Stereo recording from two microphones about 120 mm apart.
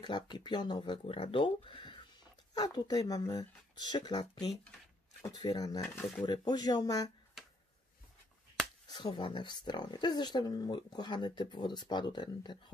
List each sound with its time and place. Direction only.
0.0 s speech: 40° left (ahead or behind)
2.5 s speech: 35° left (ahead or behind)
8.8 s speech: 35° left (ahead or behind)